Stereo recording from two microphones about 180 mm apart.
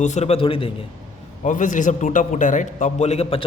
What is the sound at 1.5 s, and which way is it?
A man's voice, 45° left (ahead or behind).